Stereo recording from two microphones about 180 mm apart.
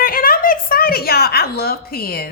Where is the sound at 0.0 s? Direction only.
55° left (ahead or behind).